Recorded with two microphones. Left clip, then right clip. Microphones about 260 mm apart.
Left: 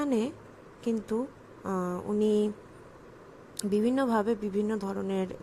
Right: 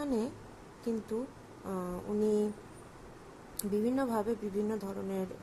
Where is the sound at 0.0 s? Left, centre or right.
Left.